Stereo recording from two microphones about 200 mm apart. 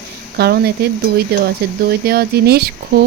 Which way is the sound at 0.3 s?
55° right (ahead or behind).